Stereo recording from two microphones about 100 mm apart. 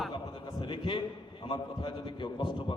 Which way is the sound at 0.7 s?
50° left (ahead or behind).